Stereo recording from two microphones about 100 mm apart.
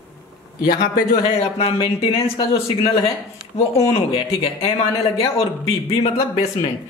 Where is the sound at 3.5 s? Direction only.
80° left.